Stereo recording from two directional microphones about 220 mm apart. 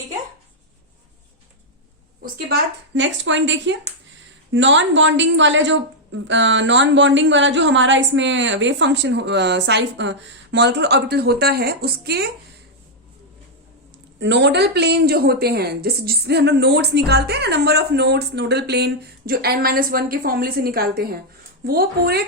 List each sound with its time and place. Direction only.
2.2 s a woman's voice: 50° right (ahead or behind)
14.2 s speech: 55° right (ahead or behind)